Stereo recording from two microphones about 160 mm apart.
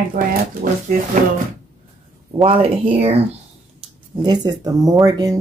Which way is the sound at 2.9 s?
40° right (ahead or behind).